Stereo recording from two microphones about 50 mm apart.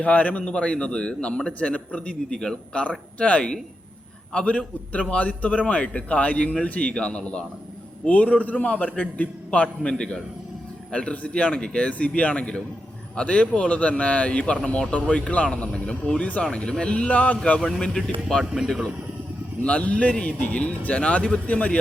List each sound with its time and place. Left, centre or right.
0.0 s a man's voice: left
0.4 s a man's voice: left
2.3 s speech: centre
3.2 s a man's voice: left
17.7 s speech: centre
19.6 s a man's voice: left